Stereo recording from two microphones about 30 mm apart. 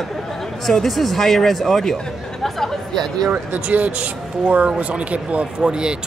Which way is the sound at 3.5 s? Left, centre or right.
Right.